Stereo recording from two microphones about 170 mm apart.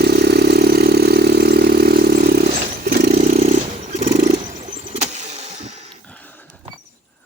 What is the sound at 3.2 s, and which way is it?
Vehicle, 40° right (ahead or behind).